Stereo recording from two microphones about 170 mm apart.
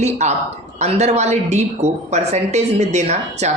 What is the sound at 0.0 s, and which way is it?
A woman's voice, 40° right (ahead or behind).